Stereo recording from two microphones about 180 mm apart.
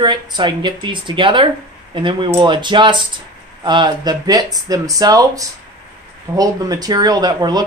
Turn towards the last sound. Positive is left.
turn(degrees=-20)  # may be behind; listen again after turning